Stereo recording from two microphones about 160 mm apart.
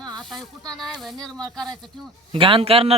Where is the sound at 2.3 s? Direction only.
35° right (ahead or behind).